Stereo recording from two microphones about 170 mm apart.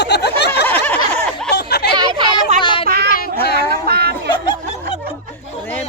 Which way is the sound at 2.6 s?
30° left (ahead or behind).